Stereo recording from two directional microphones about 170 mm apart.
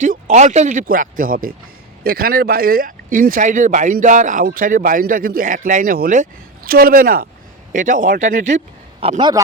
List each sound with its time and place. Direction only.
0.0 s speech: 45° right (ahead or behind)